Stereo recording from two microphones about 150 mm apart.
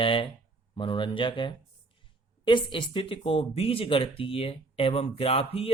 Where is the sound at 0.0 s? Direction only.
35° left (ahead or behind).